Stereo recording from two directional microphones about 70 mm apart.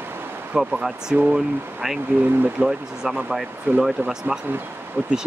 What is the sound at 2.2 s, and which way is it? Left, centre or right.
Speech, right.